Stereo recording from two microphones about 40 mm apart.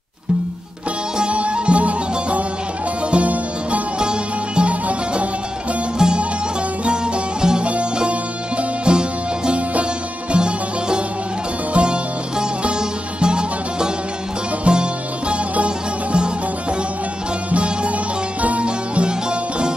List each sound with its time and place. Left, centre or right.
1.1 s music: right
5.9 s music: right
7.6 s music: right
10.3 s music: right
17.5 s music: right